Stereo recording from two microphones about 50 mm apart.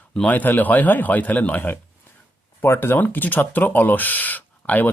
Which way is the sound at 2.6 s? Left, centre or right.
Left.